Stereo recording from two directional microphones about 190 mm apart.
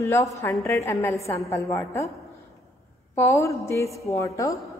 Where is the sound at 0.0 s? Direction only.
15° left (ahead or behind).